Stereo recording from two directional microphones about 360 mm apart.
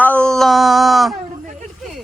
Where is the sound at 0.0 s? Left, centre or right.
Centre.